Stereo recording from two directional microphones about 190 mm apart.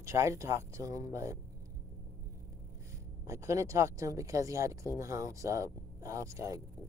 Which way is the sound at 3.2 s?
15° right (ahead or behind).